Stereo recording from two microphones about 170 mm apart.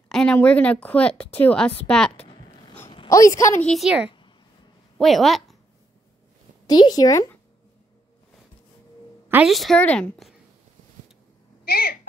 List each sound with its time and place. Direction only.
0.1 s a woman's voice: 5° left (ahead or behind)
2.2 s a sound: 25° left (ahead or behind)
2.9 s a man's voice: 25° left (ahead or behind)
3.6 s a woman's voice: centre (ahead or behind)
6.7 s a woman's voice: 20° left (ahead or behind)
9.3 s a woman's voice: centre (ahead or behind)
11.6 s a sound: 65° left (ahead or behind)